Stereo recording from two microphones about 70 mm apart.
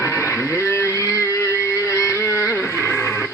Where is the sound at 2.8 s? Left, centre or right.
Left.